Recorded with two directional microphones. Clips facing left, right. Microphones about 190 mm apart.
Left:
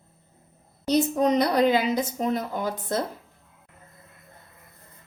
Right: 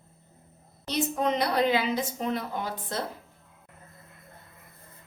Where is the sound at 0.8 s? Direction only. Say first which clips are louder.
Left 6 dB; 40° left (ahead or behind).